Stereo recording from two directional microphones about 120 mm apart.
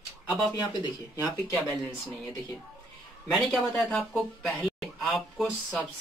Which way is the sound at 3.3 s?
Centre (ahead or behind).